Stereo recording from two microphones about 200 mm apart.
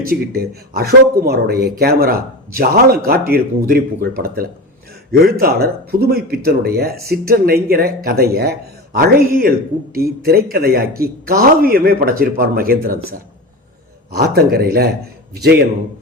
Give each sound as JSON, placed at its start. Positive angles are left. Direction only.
{"t": 0.1, "sound": "speech", "side_deg": -50}
{"t": 14.3, "sound": "speech", "side_deg": -50}